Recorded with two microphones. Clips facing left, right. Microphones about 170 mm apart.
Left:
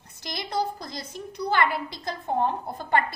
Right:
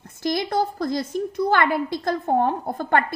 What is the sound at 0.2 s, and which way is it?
A woman's voice, 50° right (ahead or behind).